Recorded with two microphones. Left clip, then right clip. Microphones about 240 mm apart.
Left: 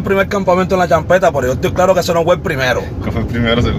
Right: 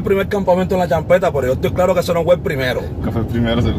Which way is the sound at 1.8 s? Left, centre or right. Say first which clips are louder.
Left 5 dB; centre.